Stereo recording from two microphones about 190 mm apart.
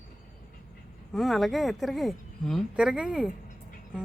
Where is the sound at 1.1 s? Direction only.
Centre (ahead or behind).